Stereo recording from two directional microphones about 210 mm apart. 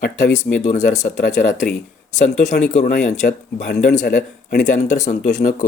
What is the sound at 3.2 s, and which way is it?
Speech, 50° left (ahead or behind).